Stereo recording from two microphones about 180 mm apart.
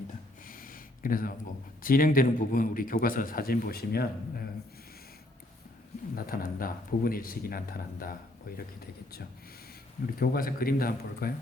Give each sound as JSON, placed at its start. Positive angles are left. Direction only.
{"t": 0.4, "sound": "a sound", "side_deg": 50}
{"t": 1.8, "sound": "a man's voice", "side_deg": 50}
{"t": 6.1, "sound": "a man's voice", "side_deg": 55}
{"t": 10.2, "sound": "a man's voice", "side_deg": 55}